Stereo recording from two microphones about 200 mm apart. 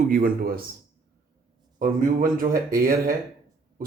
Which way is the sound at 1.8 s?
45° right (ahead or behind).